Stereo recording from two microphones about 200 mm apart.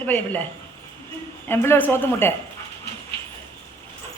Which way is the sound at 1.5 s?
10° left (ahead or behind).